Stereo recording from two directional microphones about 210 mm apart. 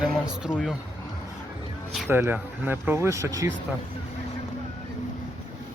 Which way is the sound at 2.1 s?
10° right (ahead or behind).